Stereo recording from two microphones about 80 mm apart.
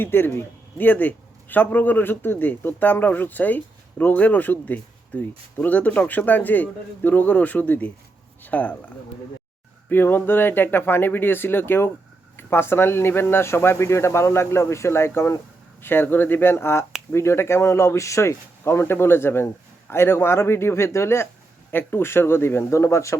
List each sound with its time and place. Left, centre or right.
0.0 s a man's voice: left
9.9 s a man's voice: left